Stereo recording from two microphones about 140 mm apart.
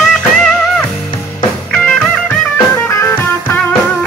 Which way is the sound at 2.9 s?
20° left (ahead or behind).